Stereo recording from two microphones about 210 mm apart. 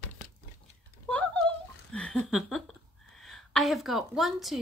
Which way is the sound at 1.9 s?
5° left (ahead or behind).